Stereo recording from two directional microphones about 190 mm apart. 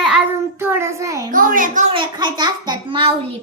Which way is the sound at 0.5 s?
10° right (ahead or behind).